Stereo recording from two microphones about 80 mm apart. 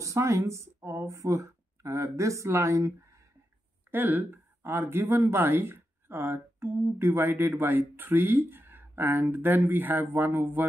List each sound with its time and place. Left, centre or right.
0.0 s speech: right
3.9 s speech: right